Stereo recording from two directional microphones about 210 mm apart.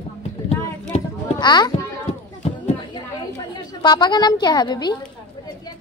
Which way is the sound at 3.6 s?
20° left (ahead or behind).